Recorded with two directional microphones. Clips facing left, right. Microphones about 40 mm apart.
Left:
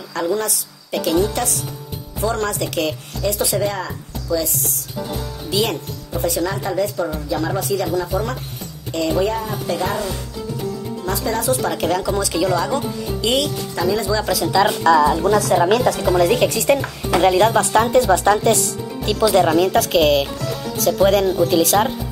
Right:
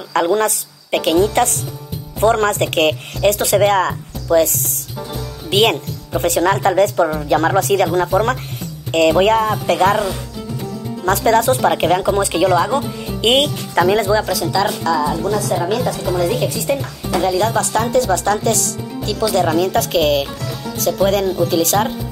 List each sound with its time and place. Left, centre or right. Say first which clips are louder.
0.1 s a woman's voice: right 6 dB; right
5.5 s speech: right 6 dB; right
13.2 s a woman's voice: right 5 dB; right
14.2 s speech: left 1 dB; centre
14.8 s a woman's voice: left 4 dB; left
17.5 s speech: left 2 dB; left
19.2 s speech: left 1 dB; centre